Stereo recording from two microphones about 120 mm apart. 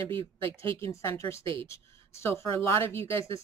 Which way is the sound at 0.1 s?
50° right (ahead or behind).